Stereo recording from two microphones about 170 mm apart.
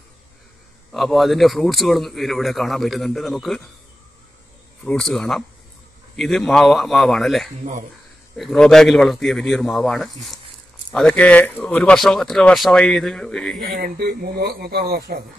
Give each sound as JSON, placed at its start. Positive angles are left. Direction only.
{"t": 0.9, "sound": "a man's voice", "side_deg": 0}
{"t": 4.8, "sound": "a man's voice", "side_deg": 0}
{"t": 13.6, "sound": "speech", "side_deg": -60}